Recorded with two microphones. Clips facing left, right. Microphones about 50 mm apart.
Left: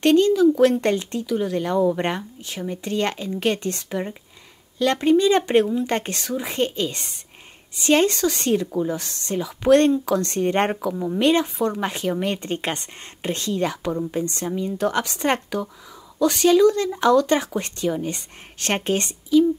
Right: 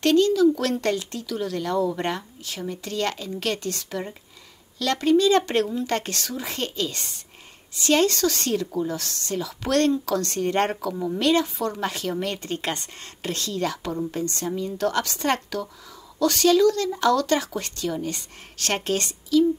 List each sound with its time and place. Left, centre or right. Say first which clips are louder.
0.0 s speech: left 2 dB; left